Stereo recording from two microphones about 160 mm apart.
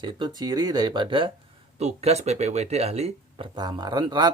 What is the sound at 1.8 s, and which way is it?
Speech, 40° right (ahead or behind).